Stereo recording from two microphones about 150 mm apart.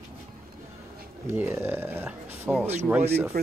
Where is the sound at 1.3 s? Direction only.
15° right (ahead or behind).